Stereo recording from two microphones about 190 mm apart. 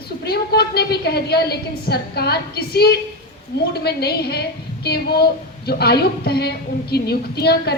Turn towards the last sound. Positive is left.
turn(degrees=60)  # may be behind; listen again after turning